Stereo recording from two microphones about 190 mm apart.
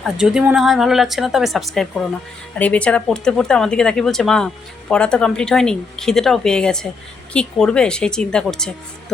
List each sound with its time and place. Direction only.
0.0 s speech: 5° right (ahead or behind)